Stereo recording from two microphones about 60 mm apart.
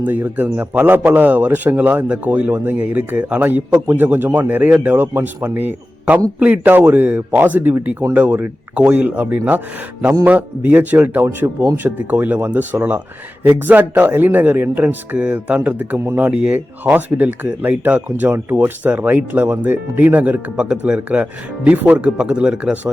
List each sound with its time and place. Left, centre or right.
0.0 s a man's voice: right